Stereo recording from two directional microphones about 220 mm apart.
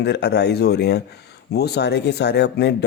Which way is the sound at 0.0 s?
50° left (ahead or behind).